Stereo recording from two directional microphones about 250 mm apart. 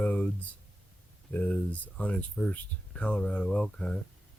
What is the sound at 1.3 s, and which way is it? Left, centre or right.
Speech, centre.